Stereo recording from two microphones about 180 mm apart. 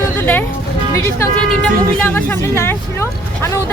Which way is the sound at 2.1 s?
10° left (ahead or behind).